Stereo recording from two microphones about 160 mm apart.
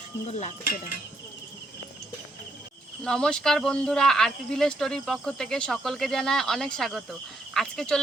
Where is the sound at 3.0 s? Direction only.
5° left (ahead or behind).